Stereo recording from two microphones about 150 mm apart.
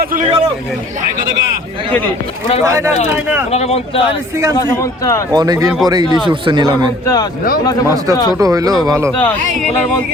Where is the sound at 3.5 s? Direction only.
45° left (ahead or behind).